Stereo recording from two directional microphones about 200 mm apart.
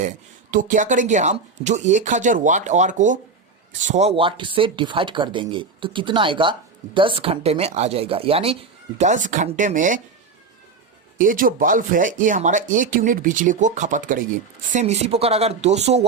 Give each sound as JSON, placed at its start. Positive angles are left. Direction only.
{"t": 0.0, "sound": "speech", "side_deg": -40}
{"t": 11.2, "sound": "speech", "side_deg": -45}